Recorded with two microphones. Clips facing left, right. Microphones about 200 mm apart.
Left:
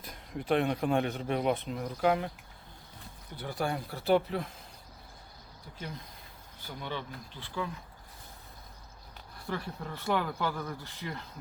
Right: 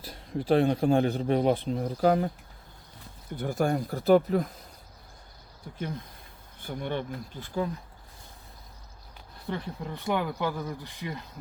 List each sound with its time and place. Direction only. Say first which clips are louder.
0.0 s a man's voice: right 6 dB; 30° right (ahead or behind)
3.3 s speech: right 7 dB; 45° right (ahead or behind)
6.6 s speech: right 7 dB; 50° right (ahead or behind)
9.5 s speech: right 3 dB; 15° right (ahead or behind)